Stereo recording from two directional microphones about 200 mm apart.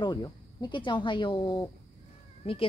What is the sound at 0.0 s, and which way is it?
Speech, 20° left (ahead or behind).